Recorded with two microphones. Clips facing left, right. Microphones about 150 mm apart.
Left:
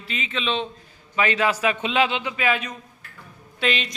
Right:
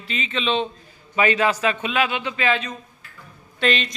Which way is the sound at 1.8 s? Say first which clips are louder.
Left 1 dB; 20° left (ahead or behind).